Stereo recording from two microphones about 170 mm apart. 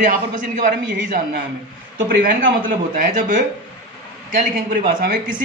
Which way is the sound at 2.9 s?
50° right (ahead or behind).